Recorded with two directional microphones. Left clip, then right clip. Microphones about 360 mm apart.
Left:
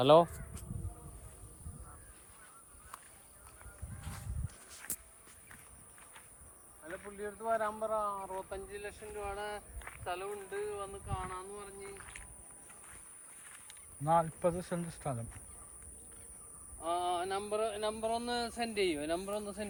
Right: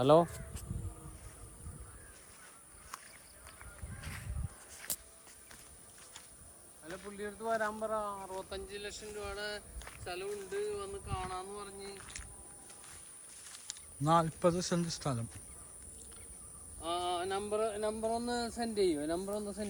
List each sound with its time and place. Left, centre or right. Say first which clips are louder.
0.0 s speech: left 2 dB; centre
2.9 s a sound: right 3 dB; centre
4.9 s walk: right 6 dB; centre
6.8 s a sound: left 1 dB; centre
7.2 s speech: left 1 dB; centre
9.7 s speech: left 2 dB; centre
14.0 s speech: right 1 dB; centre
16.8 s speech: left 1 dB; centre